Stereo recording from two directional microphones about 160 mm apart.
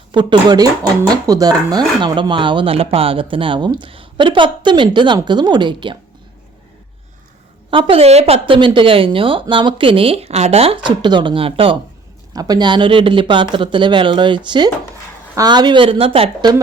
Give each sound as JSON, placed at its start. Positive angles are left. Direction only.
{"t": 0.1, "sound": "speech", "side_deg": -30}
{"t": 7.7, "sound": "speech", "side_deg": -35}
{"t": 12.3, "sound": "speech", "side_deg": -25}